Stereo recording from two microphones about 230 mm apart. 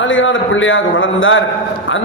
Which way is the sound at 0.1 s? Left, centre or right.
Left.